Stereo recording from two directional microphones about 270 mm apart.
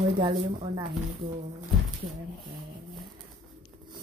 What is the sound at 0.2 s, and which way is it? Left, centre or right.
Speech, centre.